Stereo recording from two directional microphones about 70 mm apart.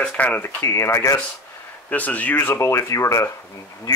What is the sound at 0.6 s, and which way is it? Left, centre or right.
Speech, left.